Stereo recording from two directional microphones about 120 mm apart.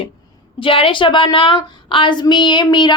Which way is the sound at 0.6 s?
45° left (ahead or behind).